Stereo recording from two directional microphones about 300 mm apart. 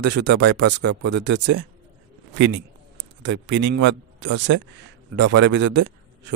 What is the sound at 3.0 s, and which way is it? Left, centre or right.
A man's voice, right.